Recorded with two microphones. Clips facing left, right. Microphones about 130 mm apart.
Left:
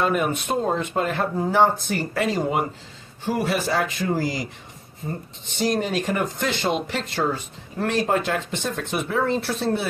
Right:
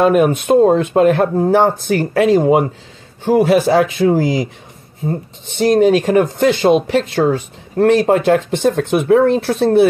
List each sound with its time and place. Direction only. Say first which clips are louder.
0.0 s speech: right 10 dB; 70° right (ahead or behind)
0.5 s speech: right 15 dB; 50° right (ahead or behind)
0.7 s speech: right 12 dB; 75° right (ahead or behind)
5.6 s speech: right 12 dB; 75° right (ahead or behind)
9.0 s speech: right 11 dB; 60° right (ahead or behind)